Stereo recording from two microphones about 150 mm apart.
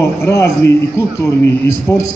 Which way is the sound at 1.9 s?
20° left (ahead or behind).